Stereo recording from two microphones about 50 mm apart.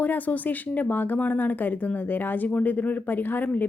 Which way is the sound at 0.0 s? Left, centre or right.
Left.